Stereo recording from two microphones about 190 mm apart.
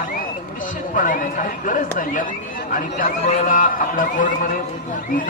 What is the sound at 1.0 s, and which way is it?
Speech, 45° left (ahead or behind).